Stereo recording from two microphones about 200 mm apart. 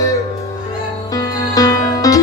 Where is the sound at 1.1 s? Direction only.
15° left (ahead or behind).